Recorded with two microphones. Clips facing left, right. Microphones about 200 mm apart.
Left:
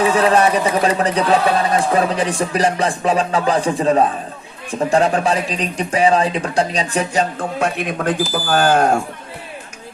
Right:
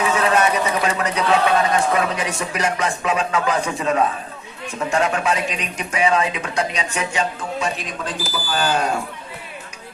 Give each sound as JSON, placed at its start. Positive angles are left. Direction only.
{"t": 0.0, "sound": "speech", "side_deg": 35}
{"t": 7.3, "sound": "a man's voice", "side_deg": 55}